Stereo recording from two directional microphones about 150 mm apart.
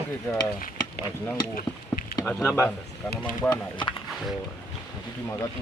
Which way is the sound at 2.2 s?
10° left (ahead or behind).